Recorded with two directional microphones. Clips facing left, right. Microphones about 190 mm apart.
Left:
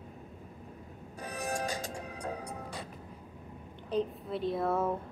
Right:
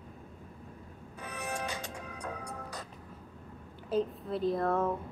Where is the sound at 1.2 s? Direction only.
40° left (ahead or behind).